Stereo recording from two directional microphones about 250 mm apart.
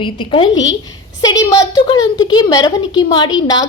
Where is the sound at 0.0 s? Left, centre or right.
Centre.